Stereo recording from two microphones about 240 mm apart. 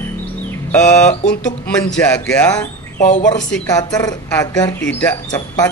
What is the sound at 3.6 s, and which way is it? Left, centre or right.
Speech, centre.